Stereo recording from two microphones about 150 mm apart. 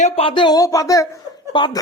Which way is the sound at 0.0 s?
40° left (ahead or behind).